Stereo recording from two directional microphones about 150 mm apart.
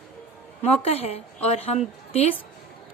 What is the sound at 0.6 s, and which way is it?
A woman's voice, 40° left (ahead or behind).